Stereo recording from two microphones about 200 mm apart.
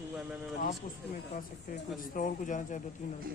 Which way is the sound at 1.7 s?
40° left (ahead or behind).